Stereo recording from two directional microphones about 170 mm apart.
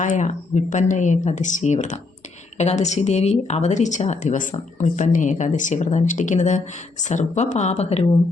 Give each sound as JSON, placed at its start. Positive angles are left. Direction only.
{"t": 0.0, "sound": "speech", "side_deg": 45}